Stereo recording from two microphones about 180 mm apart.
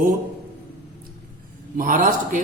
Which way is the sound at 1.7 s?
45° right (ahead or behind).